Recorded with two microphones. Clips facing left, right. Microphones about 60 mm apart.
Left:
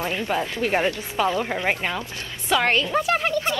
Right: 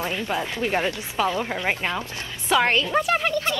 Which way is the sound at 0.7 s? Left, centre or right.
Centre.